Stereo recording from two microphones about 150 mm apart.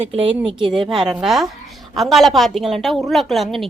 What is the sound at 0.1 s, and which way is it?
Speech, 40° right (ahead or behind).